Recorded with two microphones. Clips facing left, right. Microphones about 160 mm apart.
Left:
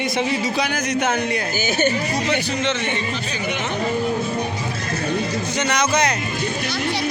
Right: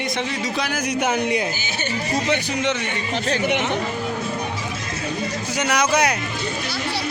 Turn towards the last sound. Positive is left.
turn(degrees=-10)  # may be behind; listen again after turning